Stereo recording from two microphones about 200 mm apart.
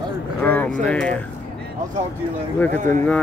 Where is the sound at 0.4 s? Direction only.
5° left (ahead or behind).